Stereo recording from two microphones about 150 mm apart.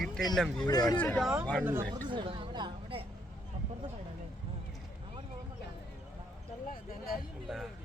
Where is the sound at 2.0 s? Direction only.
35° right (ahead or behind).